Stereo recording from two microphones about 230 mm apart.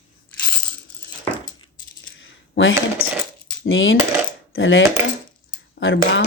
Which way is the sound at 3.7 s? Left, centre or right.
Left.